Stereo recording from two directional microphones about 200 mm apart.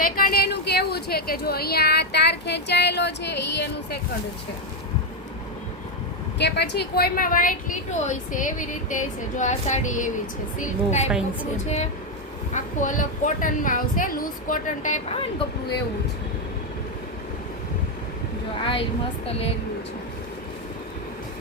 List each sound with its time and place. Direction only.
0.0 s a woman's voice: 45° left (ahead or behind)
6.4 s a woman's voice: 55° left (ahead or behind); by 15.4 s 30° left (ahead or behind)
18.6 s a woman's voice: 25° left (ahead or behind)